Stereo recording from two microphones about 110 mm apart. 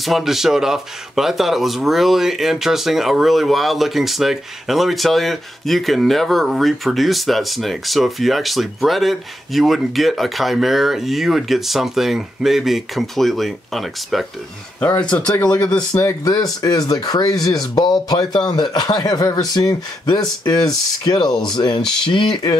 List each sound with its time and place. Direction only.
0.0 s speech: centre (ahead or behind)
14.8 s speech: 15° left (ahead or behind)
15.9 s speech: 30° left (ahead or behind)
21.3 s speech: 5° left (ahead or behind)
21.5 s speech: 45° left (ahead or behind)